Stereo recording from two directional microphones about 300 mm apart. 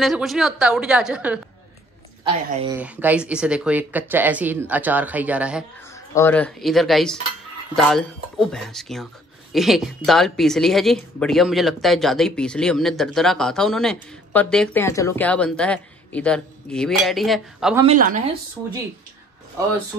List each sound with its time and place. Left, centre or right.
0.0 s a woman's voice: centre
2.2 s speech: centre
2.8 s a woman's voice: centre
5.9 s a woman's voice: centre
17.8 s a woman's voice: right